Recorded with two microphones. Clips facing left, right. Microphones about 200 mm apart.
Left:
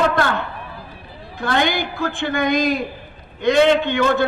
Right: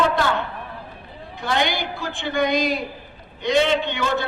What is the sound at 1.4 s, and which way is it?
A man's voice, 50° left (ahead or behind).